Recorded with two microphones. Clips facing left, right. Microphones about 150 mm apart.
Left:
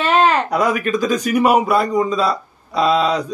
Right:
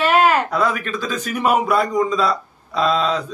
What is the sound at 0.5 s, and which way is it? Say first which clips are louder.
A man's voice: left 3 dB; 15° left (ahead or behind).